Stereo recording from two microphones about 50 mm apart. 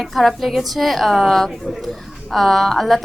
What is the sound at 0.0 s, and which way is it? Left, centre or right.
A woman's voice, centre.